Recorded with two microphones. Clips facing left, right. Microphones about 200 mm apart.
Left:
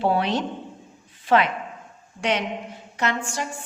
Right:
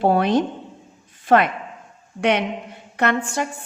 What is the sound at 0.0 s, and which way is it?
Speech, 50° right (ahead or behind).